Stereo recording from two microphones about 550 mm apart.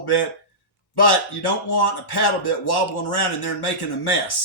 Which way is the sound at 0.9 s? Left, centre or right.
Left.